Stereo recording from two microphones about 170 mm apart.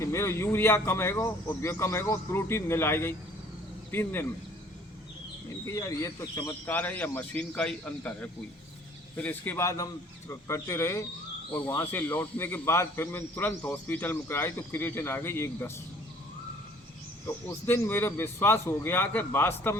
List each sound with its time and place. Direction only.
0.0 s a man's voice: 15° left (ahead or behind)
5.6 s a man's voice: 20° left (ahead or behind)
17.2 s a man's voice: 15° left (ahead or behind)